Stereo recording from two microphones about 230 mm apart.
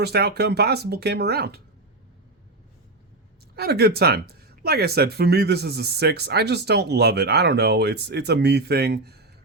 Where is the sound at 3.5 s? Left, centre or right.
Right.